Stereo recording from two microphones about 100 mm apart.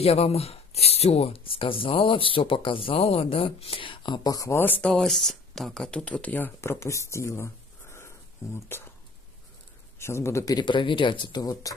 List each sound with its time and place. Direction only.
0.0 s speech: 90° left; by 4.3 s 55° left (ahead or behind)
4.3 s speech: 35° left (ahead or behind)
4.6 s speech: 20° left (ahead or behind)
9.9 s a man's voice: 25° left (ahead or behind)
10.5 s speech: 55° left (ahead or behind)
11.6 s speech: 35° left (ahead or behind)